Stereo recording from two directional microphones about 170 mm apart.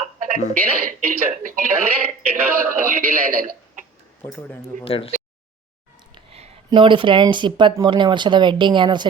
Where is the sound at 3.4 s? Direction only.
55° right (ahead or behind).